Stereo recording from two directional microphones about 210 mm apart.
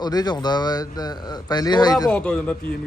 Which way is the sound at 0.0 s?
20° left (ahead or behind).